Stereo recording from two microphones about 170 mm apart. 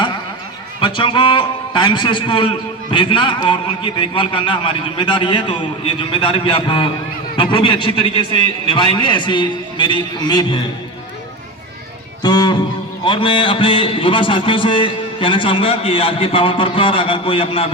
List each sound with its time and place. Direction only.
0.8 s a man's voice: 30° left (ahead or behind)
12.2 s music: 25° left (ahead or behind)
13.1 s a man's voice: 30° left (ahead or behind)